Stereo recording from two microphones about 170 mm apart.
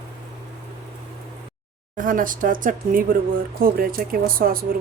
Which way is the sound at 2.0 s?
55° right (ahead or behind).